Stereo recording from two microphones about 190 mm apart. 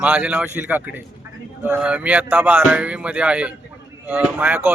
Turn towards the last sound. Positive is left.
turn(degrees=-10)  # may be behind; listen again after turning